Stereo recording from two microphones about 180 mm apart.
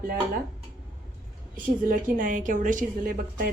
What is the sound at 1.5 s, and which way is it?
A woman's voice, 50° right (ahead or behind).